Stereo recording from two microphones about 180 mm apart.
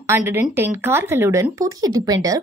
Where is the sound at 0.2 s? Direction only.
15° right (ahead or behind).